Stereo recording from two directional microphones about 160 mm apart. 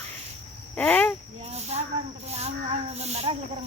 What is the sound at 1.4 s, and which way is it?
Cricket, 40° right (ahead or behind).